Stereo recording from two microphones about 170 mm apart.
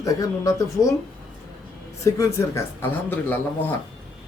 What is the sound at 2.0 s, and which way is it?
Speech, 15° left (ahead or behind).